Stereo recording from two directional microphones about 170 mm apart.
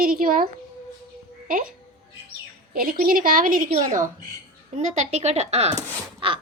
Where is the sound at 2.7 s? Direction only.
60° right (ahead or behind).